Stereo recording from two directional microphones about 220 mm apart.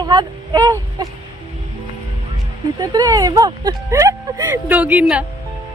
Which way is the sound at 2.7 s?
15° right (ahead or behind).